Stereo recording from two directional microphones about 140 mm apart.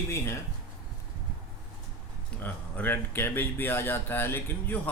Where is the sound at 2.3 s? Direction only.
15° left (ahead or behind).